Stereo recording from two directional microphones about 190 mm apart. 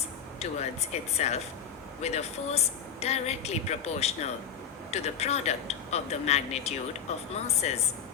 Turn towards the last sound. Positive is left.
turn(degrees=35)  # may be behind; listen again after turning